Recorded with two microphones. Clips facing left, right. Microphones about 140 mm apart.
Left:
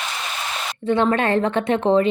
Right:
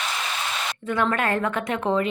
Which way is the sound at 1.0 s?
35° left (ahead or behind).